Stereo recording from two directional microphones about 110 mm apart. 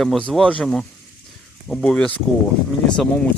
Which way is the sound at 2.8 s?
5° left (ahead or behind).